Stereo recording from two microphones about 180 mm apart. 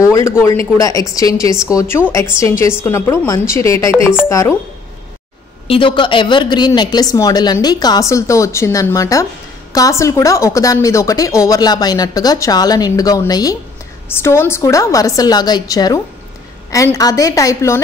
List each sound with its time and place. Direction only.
0.0 s speech: 15° left (ahead or behind)
5.7 s a woman's voice: 30° left (ahead or behind)